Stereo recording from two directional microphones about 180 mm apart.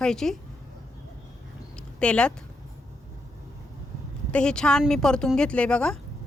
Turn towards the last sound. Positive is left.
turn(degrees=5)  # may be behind; listen again after turning